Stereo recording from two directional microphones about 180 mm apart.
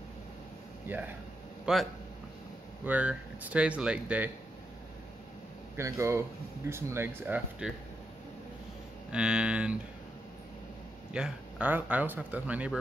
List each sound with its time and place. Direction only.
0.8 s speech: 10° right (ahead or behind)
5.8 s speech: 15° right (ahead or behind)
9.1 s speech: 5° right (ahead or behind)
11.1 s speech: 5° right (ahead or behind)